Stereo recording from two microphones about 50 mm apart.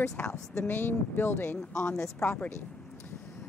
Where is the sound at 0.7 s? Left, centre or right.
Left.